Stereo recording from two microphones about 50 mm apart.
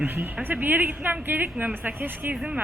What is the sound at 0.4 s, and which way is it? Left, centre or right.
Speech, right.